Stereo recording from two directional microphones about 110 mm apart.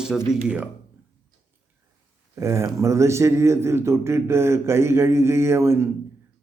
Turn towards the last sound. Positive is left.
turn(degrees=-25)  # may be behind; listen again after turning